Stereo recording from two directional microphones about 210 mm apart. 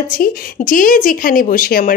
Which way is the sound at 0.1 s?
40° left (ahead or behind).